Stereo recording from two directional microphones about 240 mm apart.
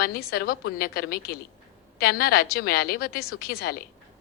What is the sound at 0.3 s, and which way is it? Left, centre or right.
A woman's voice, left.